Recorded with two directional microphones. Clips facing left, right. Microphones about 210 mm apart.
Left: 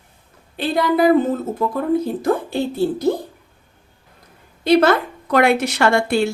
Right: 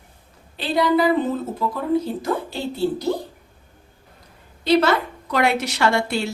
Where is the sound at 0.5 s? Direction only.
50° left (ahead or behind).